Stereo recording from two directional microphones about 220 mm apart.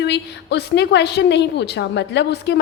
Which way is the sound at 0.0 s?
50° left (ahead or behind).